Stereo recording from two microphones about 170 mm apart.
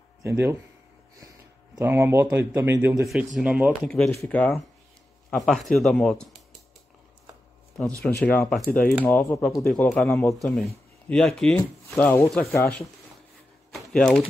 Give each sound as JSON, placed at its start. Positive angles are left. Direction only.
{"t": 0.2, "sound": "speech", "side_deg": -15}
{"t": 1.8, "sound": "a man's voice", "side_deg": -15}
{"t": 4.1, "sound": "speech", "side_deg": 10}
{"t": 7.7, "sound": "speech", "side_deg": 5}
{"t": 11.1, "sound": "speech", "side_deg": 5}
{"t": 13.7, "sound": "a sound", "side_deg": 5}